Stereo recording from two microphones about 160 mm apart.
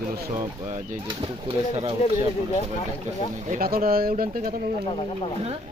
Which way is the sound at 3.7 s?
70° right (ahead or behind).